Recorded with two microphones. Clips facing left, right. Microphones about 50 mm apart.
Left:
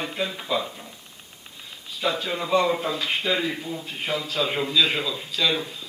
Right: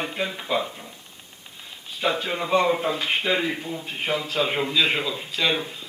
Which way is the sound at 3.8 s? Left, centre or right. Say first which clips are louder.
Right 3 dB; right.